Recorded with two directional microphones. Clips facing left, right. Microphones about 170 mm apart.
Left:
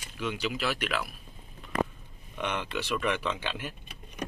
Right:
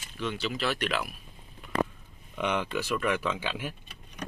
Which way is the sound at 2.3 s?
10° right (ahead or behind).